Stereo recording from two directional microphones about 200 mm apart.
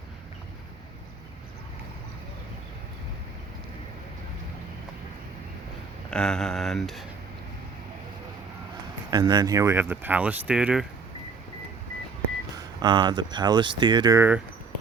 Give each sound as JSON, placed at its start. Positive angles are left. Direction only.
{"t": 6.1, "sound": "speech", "side_deg": 5}
{"t": 9.0, "sound": "speech", "side_deg": -20}
{"t": 12.5, "sound": "speech", "side_deg": -20}